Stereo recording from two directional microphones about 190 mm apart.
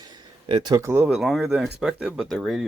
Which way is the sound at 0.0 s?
25° right (ahead or behind).